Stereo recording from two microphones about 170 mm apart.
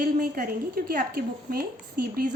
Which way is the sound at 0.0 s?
55° right (ahead or behind).